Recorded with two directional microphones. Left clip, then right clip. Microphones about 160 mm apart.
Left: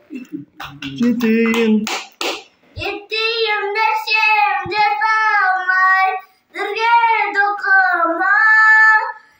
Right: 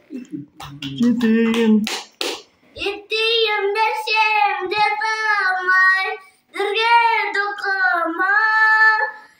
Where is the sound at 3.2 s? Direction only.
20° right (ahead or behind).